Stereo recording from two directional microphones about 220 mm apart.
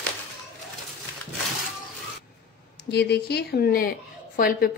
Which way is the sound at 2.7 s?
50° left (ahead or behind).